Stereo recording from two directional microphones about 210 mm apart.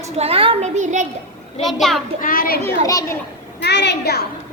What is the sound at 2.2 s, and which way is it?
Speech, 45° left (ahead or behind).